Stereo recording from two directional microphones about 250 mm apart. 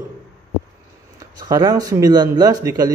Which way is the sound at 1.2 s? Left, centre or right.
Centre.